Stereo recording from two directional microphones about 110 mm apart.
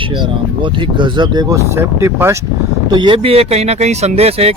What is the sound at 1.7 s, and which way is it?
Speech, 25° right (ahead or behind).